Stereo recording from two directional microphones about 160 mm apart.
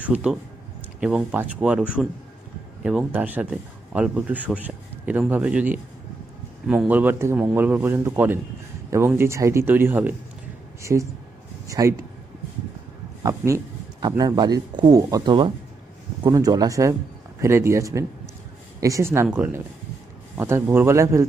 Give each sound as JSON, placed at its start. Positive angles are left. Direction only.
{"t": 0.0, "sound": "a man's voice", "side_deg": -5}
{"t": 13.2, "sound": "a man's voice", "side_deg": -20}